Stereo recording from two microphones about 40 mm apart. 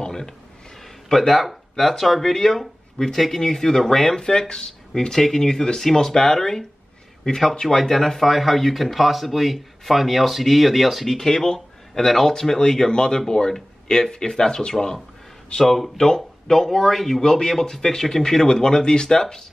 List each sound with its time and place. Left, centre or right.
0.0 s a sound: centre
1.0 s a man's voice: centre
4.3 s a man's voice: left
7.6 s speech: centre
11.1 s a man's voice: centre